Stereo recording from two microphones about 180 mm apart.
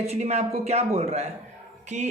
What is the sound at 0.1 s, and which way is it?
Speech, 35° right (ahead or behind).